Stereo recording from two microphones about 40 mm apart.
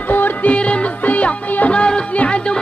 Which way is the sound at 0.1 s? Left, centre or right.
Left.